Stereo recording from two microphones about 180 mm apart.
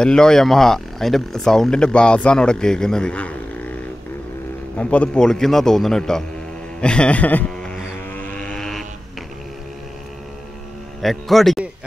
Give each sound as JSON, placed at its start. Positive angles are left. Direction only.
{"t": 0.0, "sound": "speech", "side_deg": 5}
{"t": 4.7, "sound": "speech", "side_deg": 5}
{"t": 8.4, "sound": "vehicle", "side_deg": 5}
{"t": 11.0, "sound": "a man's voice", "side_deg": 0}